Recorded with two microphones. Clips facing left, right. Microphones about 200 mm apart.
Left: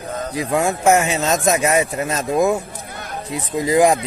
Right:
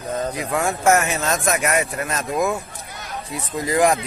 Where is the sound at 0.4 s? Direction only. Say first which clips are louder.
Left 9 dB; 30° left (ahead or behind).